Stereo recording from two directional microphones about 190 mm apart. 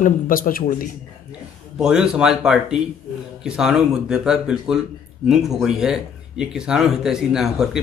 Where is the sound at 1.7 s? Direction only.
5° right (ahead or behind).